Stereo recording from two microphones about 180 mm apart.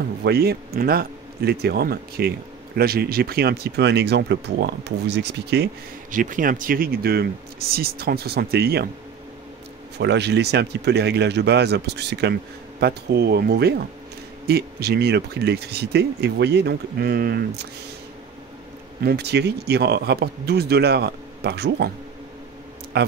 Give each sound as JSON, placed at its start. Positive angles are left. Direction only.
{"t": 0.2, "sound": "speech", "side_deg": -65}
{"t": 6.1, "sound": "speech", "side_deg": -45}
{"t": 9.9, "sound": "speech", "side_deg": -70}
{"t": 19.0, "sound": "speech", "side_deg": -65}
{"t": 22.9, "sound": "speech", "side_deg": -65}